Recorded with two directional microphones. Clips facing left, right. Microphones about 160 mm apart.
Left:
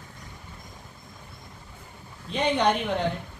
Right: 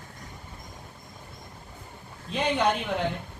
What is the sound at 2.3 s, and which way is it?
Speech, 5° right (ahead or behind).